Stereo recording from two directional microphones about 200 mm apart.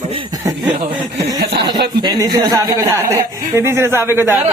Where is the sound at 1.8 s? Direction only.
55° right (ahead or behind).